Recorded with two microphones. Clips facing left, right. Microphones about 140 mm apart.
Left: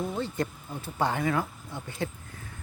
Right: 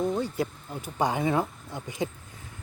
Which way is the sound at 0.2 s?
10° right (ahead or behind).